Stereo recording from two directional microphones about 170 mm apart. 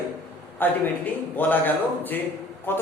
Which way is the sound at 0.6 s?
10° left (ahead or behind).